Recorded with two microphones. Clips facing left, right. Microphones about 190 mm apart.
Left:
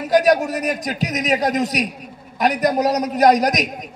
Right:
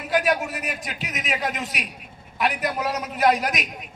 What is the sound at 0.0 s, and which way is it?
A man's voice, 40° left (ahead or behind).